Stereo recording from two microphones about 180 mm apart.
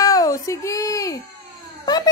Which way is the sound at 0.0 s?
20° left (ahead or behind).